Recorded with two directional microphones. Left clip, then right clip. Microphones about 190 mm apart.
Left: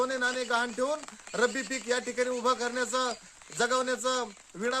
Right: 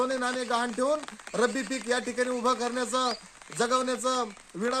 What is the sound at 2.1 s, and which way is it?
Speech, 20° left (ahead or behind).